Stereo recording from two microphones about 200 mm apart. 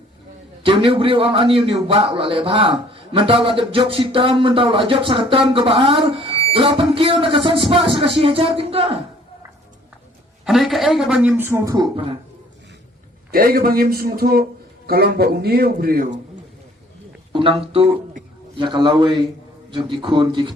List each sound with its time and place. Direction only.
0.6 s a man's voice: 25° right (ahead or behind)
10.4 s a man's voice: centre (ahead or behind); by 12.1 s 25° right (ahead or behind)
13.3 s a man's voice: 45° right (ahead or behind)
17.3 s a man's voice: 25° right (ahead or behind)